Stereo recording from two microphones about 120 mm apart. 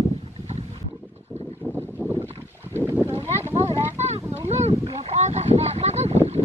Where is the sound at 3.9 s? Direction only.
65° right (ahead or behind).